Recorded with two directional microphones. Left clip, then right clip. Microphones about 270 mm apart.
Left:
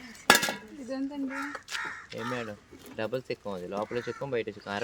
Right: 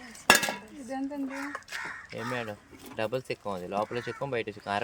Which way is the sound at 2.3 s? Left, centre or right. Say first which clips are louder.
Right 2 dB; right.